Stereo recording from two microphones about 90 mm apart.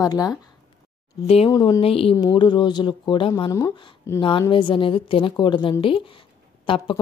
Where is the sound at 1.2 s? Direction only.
90° left.